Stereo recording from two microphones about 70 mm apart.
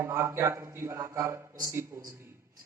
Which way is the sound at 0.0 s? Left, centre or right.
Right.